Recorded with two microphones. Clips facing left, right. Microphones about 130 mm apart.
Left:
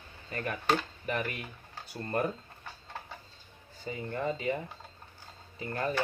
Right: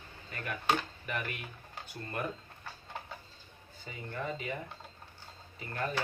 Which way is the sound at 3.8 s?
35° left (ahead or behind).